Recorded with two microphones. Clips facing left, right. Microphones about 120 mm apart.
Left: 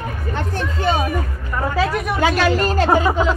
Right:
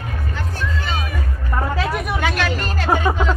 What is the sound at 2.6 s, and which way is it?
Speech, 35° left (ahead or behind).